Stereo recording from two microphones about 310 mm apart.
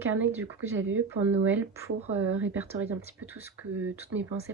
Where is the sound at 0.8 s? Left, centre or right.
Right.